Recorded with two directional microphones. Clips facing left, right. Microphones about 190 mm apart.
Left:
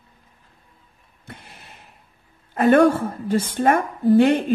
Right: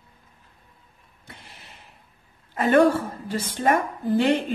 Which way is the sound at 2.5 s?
50° left (ahead or behind).